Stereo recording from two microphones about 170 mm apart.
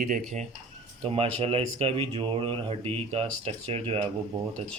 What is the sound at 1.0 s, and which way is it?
Speech, 35° right (ahead or behind).